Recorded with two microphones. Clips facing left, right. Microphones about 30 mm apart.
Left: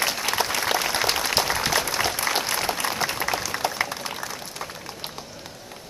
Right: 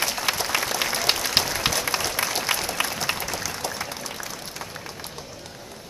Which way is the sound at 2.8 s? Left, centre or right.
Right.